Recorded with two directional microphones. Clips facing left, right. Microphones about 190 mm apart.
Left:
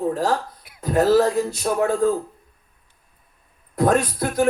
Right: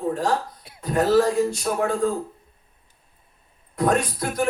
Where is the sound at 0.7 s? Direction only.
30° right (ahead or behind).